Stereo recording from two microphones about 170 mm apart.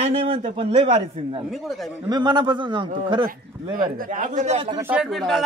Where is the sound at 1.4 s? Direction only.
Centre (ahead or behind).